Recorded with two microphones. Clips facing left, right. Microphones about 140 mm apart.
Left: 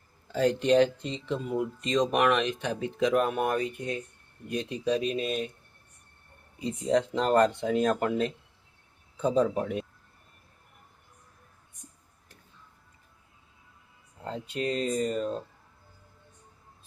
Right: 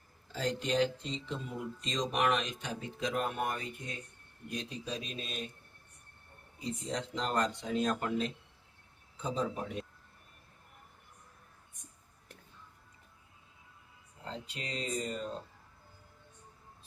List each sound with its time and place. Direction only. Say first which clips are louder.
0.3 s speech: left 9 dB; 65° left (ahead or behind)
6.8 s speech: left 12 dB; 60° left (ahead or behind)
14.3 s speech: left 11 dB; 50° left (ahead or behind)